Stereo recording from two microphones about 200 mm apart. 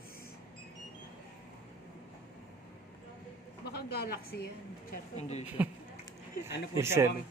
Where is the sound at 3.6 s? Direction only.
50° left (ahead or behind).